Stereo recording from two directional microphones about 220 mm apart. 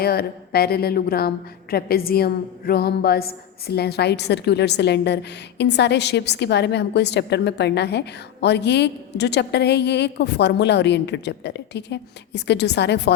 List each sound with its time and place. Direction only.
0.0 s a woman's voice: 45° left (ahead or behind)